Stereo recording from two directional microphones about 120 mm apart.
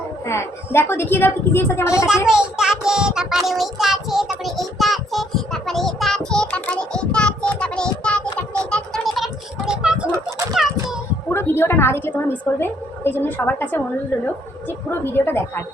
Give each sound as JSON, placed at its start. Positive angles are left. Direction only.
{"t": 0.3, "sound": "a woman's voice", "side_deg": 20}
{"t": 2.2, "sound": "child singing", "side_deg": -5}
{"t": 10.5, "sound": "a sound", "side_deg": 0}
{"t": 11.3, "sound": "a woman's voice", "side_deg": 20}